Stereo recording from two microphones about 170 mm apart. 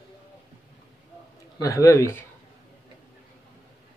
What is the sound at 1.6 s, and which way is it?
Speech, 20° left (ahead or behind).